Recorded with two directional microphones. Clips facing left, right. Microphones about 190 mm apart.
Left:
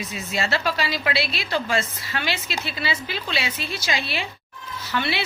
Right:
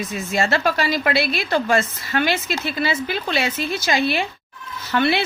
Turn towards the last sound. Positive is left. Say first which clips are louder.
# right 7 dB
turn(degrees=-50)  # may be behind; listen again after turning